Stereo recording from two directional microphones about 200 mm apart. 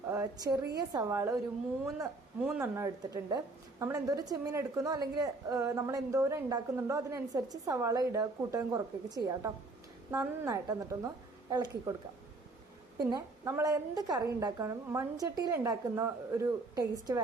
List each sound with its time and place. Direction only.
0.1 s a woman's voice: 15° right (ahead or behind)
2.6 s a woman's voice: 15° right (ahead or behind)
13.0 s a woman's voice: 20° right (ahead or behind)